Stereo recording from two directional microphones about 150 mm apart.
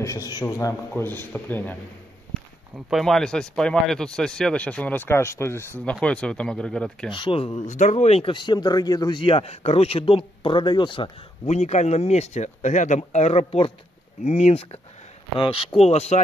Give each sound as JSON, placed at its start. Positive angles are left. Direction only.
{"t": 0.0, "sound": "speech", "side_deg": 20}
{"t": 2.7, "sound": "speech", "side_deg": 0}
{"t": 7.1, "sound": "speech", "side_deg": 35}
{"t": 7.6, "sound": "speech", "side_deg": 55}
{"t": 11.4, "sound": "speech", "side_deg": 50}
{"t": 15.8, "sound": "speech", "side_deg": 45}